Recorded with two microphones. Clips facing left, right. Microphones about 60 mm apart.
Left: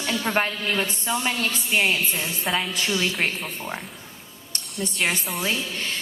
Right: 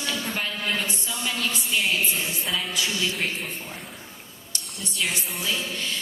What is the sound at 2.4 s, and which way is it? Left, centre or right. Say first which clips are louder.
Speech: left 7 dB; left.